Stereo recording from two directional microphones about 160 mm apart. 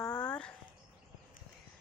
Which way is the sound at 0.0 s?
20° left (ahead or behind).